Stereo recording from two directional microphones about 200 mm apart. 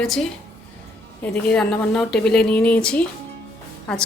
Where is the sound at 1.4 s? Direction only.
5° left (ahead or behind).